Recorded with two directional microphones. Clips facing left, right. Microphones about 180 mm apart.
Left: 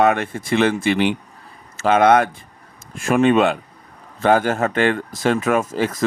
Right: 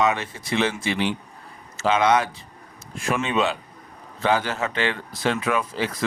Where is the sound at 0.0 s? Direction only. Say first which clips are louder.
Left 6 dB; 55° left (ahead or behind).